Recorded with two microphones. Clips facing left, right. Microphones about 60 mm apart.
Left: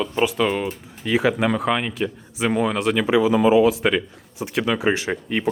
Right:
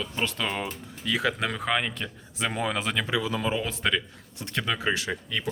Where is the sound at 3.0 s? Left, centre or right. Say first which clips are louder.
Left 14 dB; left.